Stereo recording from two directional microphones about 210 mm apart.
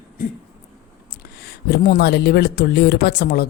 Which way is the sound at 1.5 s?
45° left (ahead or behind).